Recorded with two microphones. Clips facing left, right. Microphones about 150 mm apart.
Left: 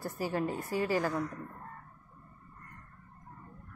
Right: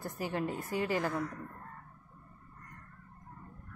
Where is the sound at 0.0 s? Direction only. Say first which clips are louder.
Left 2 dB; 20° right (ahead or behind).